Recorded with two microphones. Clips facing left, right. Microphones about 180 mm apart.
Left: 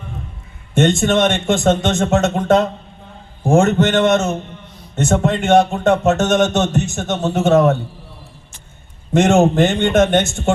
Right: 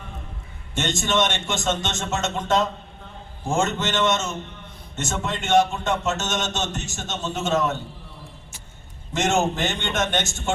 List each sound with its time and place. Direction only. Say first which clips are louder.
0.7 s speech: left 10 dB; 60° left (ahead or behind)
9.1 s speech: left 10 dB; 55° left (ahead or behind)